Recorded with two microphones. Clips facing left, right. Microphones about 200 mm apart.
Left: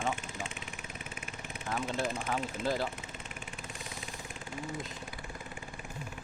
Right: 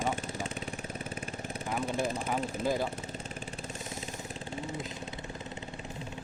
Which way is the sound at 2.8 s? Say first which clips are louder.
Right 3 dB; 35° right (ahead or behind).